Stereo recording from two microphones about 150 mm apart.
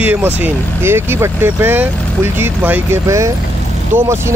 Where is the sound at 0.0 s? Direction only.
10° right (ahead or behind).